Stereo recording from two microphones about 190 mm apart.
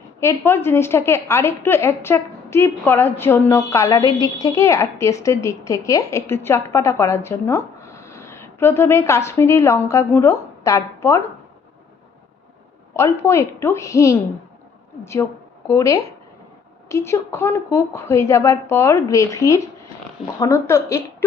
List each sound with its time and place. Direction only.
0.2 s a woman's voice: 15° left (ahead or behind)
12.9 s a woman's voice: 15° left (ahead or behind)
15.6 s a woman's voice: 15° left (ahead or behind)